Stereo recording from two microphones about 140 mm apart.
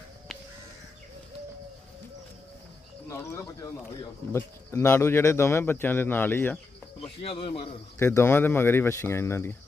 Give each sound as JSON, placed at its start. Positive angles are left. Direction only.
{"t": 3.1, "sound": "speech", "side_deg": 25}
{"t": 7.2, "sound": "a man's voice", "side_deg": 40}
{"t": 7.9, "sound": "speech", "side_deg": 20}